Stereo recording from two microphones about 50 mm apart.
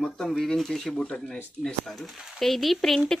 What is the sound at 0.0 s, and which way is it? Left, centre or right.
Speech, centre.